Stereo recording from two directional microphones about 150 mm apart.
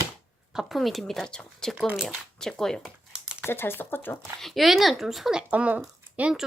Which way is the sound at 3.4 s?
15° left (ahead or behind).